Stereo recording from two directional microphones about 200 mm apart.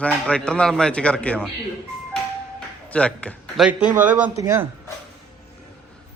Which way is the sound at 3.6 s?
5° right (ahead or behind).